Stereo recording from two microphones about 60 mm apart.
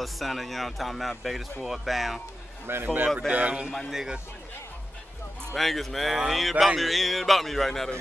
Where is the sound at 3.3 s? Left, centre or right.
Right.